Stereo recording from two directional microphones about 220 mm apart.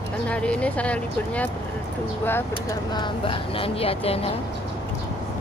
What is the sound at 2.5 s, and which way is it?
Speech, 20° left (ahead or behind).